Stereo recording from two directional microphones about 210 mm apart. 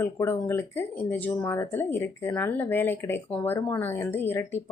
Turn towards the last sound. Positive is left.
turn(degrees=10)  # may be behind; listen again after turning